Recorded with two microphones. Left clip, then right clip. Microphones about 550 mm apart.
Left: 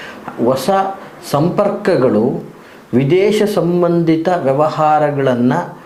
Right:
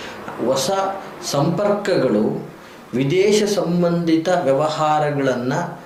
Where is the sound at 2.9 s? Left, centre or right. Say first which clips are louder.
Left 4 dB; left.